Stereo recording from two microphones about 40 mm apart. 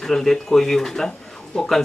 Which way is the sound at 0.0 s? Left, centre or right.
Centre.